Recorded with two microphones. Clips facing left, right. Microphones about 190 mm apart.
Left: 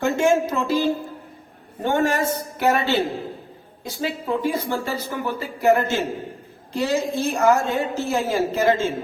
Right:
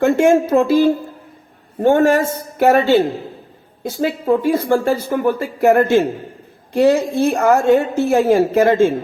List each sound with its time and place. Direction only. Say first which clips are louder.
0.0 s a woman's voice: right 6 dB; 60° right (ahead or behind)